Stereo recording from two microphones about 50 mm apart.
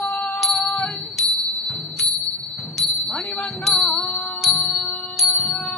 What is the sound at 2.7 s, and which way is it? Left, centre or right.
Music, centre.